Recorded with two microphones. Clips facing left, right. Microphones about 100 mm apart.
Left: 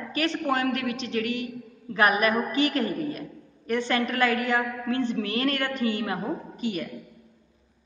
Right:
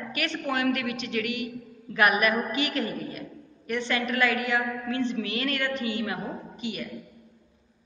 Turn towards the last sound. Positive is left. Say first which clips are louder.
# left 4 dB
turn(degrees=45)  # may be behind; listen again after turning